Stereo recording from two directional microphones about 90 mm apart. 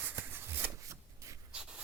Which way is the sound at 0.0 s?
25° right (ahead or behind).